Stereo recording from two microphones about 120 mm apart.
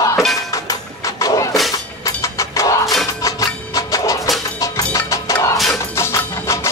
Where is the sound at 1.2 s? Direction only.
30° left (ahead or behind).